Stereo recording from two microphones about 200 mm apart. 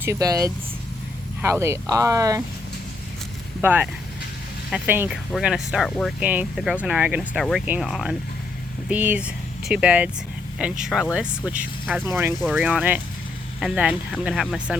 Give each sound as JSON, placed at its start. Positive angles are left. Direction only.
{"t": 0.0, "sound": "speech", "side_deg": -15}
{"t": 3.6, "sound": "speech", "side_deg": -10}